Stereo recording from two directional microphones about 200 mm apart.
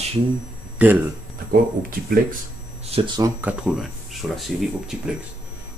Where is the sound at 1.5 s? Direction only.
45° right (ahead or behind).